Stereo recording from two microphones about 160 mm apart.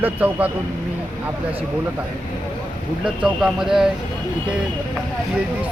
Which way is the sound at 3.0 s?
5° right (ahead or behind).